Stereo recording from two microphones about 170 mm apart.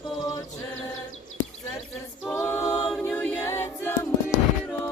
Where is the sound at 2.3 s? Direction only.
10° left (ahead or behind).